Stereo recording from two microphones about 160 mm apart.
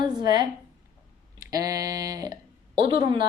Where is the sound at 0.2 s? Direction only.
25° right (ahead or behind).